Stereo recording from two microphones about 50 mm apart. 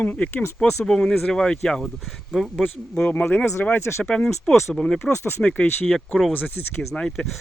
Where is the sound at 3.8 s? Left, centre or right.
Left.